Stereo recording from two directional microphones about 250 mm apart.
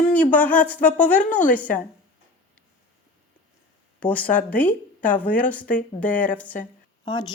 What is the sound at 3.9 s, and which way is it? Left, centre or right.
A woman's voice, centre.